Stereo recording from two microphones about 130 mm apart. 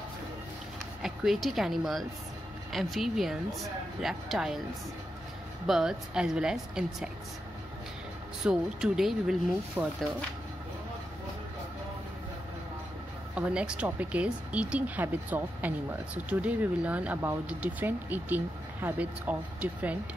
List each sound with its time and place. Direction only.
1.0 s a woman's voice: centre (ahead or behind)
5.7 s a woman's voice: 5° right (ahead or behind)
8.5 s a woman's voice: 5° right (ahead or behind)
9.8 s speech: 15° right (ahead or behind)
13.3 s speech: 10° right (ahead or behind)